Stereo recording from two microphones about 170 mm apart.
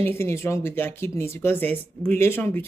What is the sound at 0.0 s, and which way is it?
A woman's voice, 15° left (ahead or behind).